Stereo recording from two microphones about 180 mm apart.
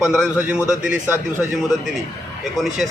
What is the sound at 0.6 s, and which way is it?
Speech, 15° left (ahead or behind).